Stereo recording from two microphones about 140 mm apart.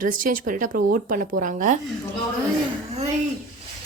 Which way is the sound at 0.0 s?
75° right (ahead or behind).